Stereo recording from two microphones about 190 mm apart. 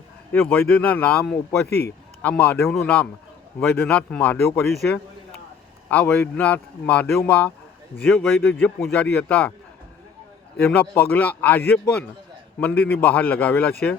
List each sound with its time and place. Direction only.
0.3 s speech: 5° left (ahead or behind)
1.6 s a man's voice: 55° left (ahead or behind)
2.2 s a man's voice: 5° left (ahead or behind)
10.6 s speech: 5° left (ahead or behind)